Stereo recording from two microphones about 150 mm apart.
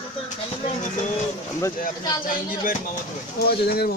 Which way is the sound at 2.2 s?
70° left (ahead or behind).